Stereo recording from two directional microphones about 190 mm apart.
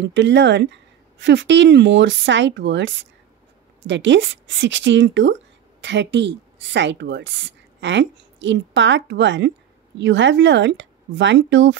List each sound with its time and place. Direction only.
0.1 s a woman's voice: 70° right (ahead or behind)